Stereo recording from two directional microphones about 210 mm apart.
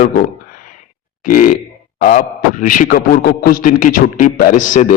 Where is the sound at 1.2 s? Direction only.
40° left (ahead or behind).